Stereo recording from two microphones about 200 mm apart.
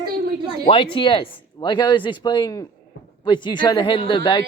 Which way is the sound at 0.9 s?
25° left (ahead or behind).